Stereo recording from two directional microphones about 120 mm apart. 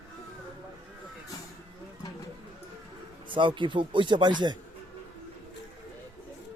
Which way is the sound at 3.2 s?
45° right (ahead or behind).